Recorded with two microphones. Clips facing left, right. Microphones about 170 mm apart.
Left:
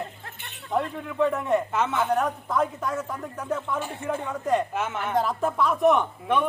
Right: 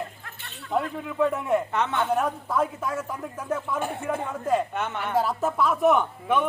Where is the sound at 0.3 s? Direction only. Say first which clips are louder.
Even; 20° left (ahead or behind).